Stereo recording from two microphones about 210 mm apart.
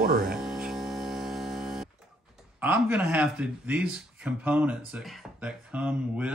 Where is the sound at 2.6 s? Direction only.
10° right (ahead or behind).